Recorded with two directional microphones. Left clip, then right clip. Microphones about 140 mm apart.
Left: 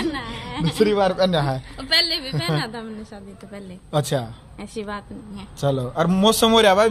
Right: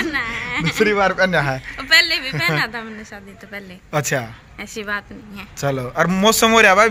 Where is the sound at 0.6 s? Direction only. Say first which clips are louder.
Right 2 dB; 15° right (ahead or behind).